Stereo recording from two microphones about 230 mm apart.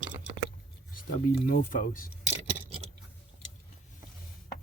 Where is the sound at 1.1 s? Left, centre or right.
Left.